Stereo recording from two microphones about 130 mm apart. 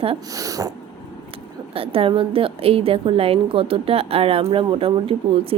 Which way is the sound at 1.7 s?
45° right (ahead or behind).